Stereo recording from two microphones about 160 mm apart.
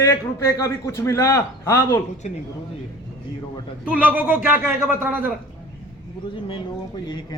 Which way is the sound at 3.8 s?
10° right (ahead or behind).